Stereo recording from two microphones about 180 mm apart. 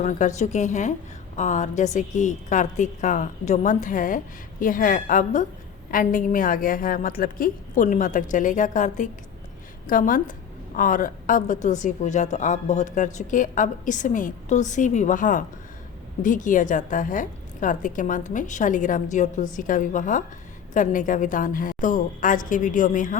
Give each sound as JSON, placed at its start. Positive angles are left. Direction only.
{"t": 0.0, "sound": "a woman's voice", "side_deg": 45}